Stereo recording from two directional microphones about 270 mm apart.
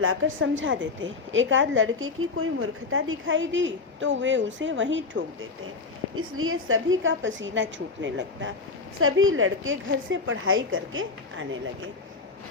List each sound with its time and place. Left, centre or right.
0.0 s a woman's voice: right